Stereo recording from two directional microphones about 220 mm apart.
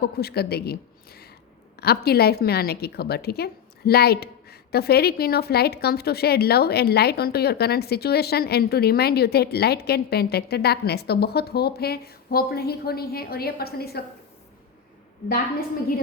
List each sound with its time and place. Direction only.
0.0 s a woman's voice: 45° left (ahead or behind)